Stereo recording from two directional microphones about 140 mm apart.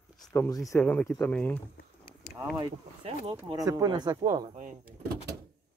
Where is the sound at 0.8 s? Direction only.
10° left (ahead or behind).